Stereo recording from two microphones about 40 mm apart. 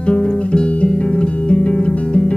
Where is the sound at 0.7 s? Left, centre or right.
Left.